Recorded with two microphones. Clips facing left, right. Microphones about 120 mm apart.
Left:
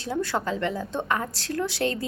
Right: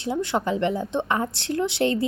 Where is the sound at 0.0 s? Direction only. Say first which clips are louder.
Right 3 dB; 20° right (ahead or behind).